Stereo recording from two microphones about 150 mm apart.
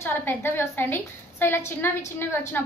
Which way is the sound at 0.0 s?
15° left (ahead or behind).